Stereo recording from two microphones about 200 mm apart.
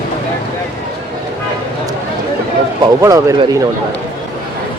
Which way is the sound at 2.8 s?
15° right (ahead or behind).